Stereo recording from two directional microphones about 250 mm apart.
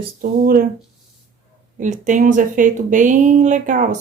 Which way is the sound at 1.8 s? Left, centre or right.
Right.